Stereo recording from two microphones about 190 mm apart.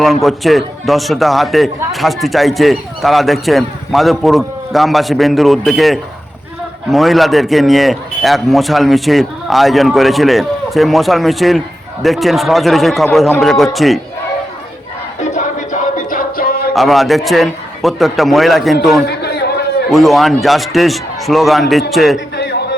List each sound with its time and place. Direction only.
0.0 s a man's voice: centre (ahead or behind)
15.2 s music: 40° left (ahead or behind)
16.7 s a man's voice: centre (ahead or behind)
19.0 s a sound: 60° left (ahead or behind)
19.9 s a man's voice: centre (ahead or behind)
22.4 s a sound: 60° left (ahead or behind)